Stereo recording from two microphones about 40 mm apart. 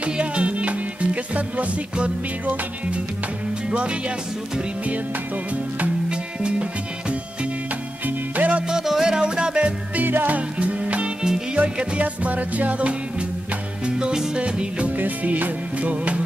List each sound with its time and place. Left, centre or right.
0.0 s music: right
6.0 s music: right
8.4 s music: right
8.6 s music: centre
10.0 s music: right
10.3 s music: right
13.8 s music: right
15.0 s music: right
15.8 s music: right